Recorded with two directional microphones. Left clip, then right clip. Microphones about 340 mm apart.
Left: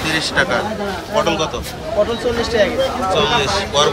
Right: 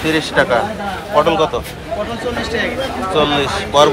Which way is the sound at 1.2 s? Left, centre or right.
Centre.